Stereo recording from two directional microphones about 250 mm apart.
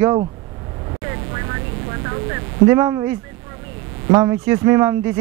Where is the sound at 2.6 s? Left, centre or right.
Centre.